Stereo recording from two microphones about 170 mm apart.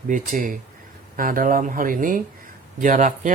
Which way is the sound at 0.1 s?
50° right (ahead or behind).